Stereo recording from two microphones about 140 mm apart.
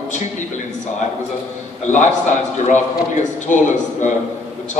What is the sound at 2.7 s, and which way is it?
A man's voice, 60° left (ahead or behind).